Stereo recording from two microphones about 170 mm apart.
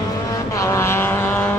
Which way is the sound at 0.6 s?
15° left (ahead or behind).